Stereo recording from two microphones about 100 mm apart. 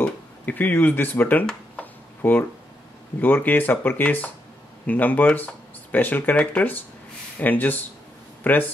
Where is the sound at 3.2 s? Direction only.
20° left (ahead or behind).